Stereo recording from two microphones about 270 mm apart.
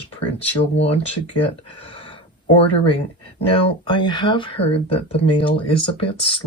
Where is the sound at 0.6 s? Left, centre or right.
Left.